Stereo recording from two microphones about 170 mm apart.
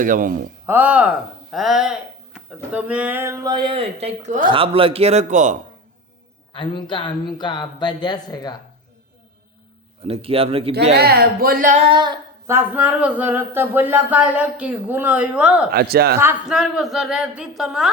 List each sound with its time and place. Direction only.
0.0 s speech: 50° right (ahead or behind)
0.7 s speech: 10° right (ahead or behind); by 4.4 s 45° right (ahead or behind)
4.4 s a man's voice: 30° right (ahead or behind)
6.5 s speech: 30° left (ahead or behind)
10.0 s a man's voice: 35° right (ahead or behind)
10.9 s speech: 65° right (ahead or behind); by 11.9 s 50° right (ahead or behind)
11.9 s female singing: 25° right (ahead or behind)
12.5 s speech: 10° right (ahead or behind)
15.7 s speech: 65° right (ahead or behind)
16.2 s a woman's voice: 5° right (ahead or behind)